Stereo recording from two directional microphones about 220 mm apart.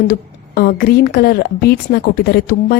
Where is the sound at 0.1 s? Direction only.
40° left (ahead or behind).